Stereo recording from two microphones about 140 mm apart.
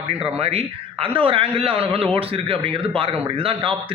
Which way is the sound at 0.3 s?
45° right (ahead or behind).